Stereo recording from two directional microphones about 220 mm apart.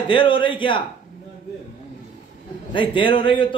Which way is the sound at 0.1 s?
25° left (ahead or behind).